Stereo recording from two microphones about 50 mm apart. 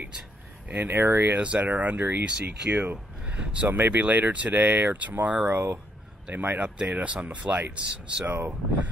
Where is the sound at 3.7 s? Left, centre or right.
Right.